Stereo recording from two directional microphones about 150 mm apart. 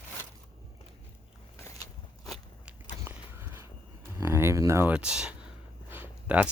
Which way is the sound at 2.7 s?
5° right (ahead or behind).